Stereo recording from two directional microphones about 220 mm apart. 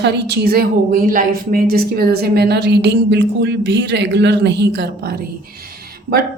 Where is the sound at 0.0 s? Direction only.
50° right (ahead or behind).